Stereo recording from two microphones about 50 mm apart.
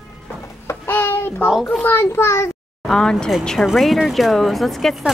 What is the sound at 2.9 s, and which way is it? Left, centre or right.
Speech, centre.